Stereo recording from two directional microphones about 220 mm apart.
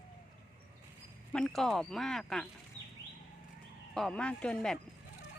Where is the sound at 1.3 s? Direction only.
5° left (ahead or behind).